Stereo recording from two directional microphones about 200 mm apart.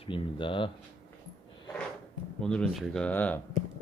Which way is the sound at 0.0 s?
25° left (ahead or behind).